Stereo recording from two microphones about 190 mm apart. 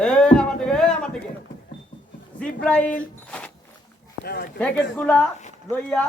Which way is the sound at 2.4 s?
5° left (ahead or behind).